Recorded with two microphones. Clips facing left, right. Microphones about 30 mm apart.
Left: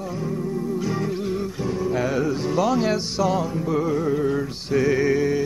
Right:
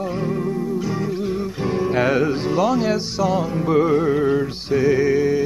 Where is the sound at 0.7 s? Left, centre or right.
Centre.